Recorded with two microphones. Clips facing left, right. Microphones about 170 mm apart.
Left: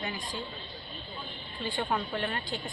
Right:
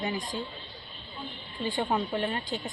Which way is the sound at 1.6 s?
20° right (ahead or behind).